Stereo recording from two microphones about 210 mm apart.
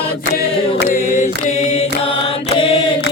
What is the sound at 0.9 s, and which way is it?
Chant, 35° left (ahead or behind).